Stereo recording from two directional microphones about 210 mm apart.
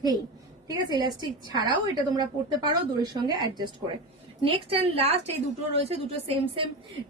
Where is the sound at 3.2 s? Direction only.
20° right (ahead or behind).